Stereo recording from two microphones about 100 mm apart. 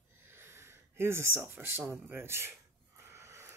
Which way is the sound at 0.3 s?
25° right (ahead or behind).